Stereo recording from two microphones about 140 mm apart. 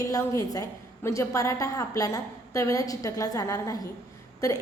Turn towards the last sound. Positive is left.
turn(degrees=25)  # may be behind; listen again after turning